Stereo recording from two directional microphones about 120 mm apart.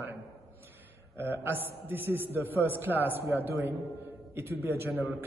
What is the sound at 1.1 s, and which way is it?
A man's voice, 20° right (ahead or behind).